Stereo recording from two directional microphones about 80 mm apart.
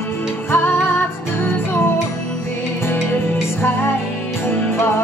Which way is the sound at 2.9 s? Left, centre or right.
Left.